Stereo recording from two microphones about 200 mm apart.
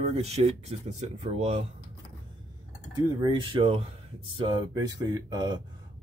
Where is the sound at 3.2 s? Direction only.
25° right (ahead or behind).